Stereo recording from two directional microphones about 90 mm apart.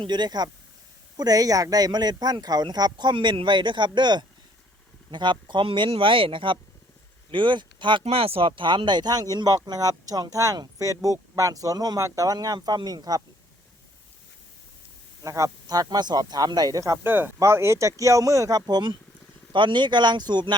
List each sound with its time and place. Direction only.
0.0 s speech: 55° right (ahead or behind)
15.2 s speech: 40° right (ahead or behind)
17.1 s speech: 20° right (ahead or behind); by 20.6 s 55° right (ahead or behind)